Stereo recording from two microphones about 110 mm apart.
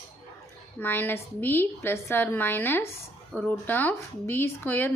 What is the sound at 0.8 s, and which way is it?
A woman's voice, 15° left (ahead or behind).